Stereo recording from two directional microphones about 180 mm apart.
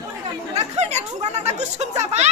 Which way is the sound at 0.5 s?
40° right (ahead or behind).